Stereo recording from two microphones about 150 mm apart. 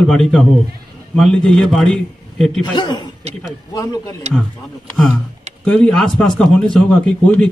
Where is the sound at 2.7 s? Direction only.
30° left (ahead or behind).